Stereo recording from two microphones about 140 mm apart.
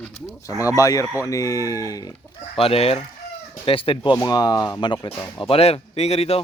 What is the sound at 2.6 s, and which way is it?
A man's voice, 45° left (ahead or behind).